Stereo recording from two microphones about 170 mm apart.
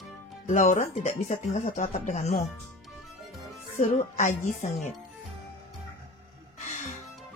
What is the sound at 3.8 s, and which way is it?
Speech, 40° left (ahead or behind).